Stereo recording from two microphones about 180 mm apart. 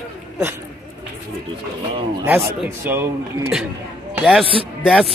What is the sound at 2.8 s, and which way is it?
Speech, 15° right (ahead or behind).